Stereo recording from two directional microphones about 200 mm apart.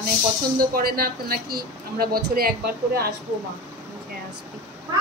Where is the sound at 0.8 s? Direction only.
45° right (ahead or behind).